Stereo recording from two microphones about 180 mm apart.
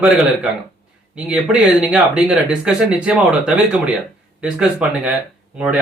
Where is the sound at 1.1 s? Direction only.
5° right (ahead or behind).